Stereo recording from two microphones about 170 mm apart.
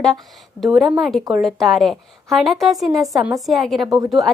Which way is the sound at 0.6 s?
Centre (ahead or behind).